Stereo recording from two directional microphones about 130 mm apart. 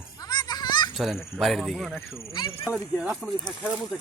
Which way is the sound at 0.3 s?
30° left (ahead or behind).